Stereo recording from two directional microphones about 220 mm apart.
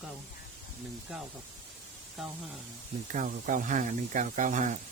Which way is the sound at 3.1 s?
35° right (ahead or behind).